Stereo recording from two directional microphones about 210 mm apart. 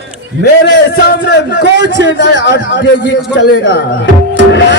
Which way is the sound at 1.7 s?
55° right (ahead or behind).